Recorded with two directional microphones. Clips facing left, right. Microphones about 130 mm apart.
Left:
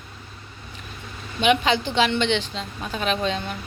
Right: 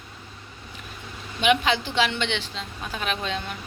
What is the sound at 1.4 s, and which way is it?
Speech, centre (ahead or behind).